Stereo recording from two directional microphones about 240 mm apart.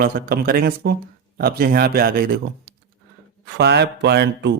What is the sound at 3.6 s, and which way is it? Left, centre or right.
Speech, right.